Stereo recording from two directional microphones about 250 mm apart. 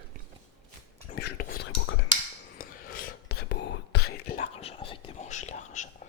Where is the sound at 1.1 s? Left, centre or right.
Left.